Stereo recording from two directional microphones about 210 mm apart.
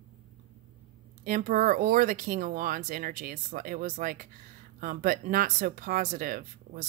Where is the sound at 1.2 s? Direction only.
40° right (ahead or behind).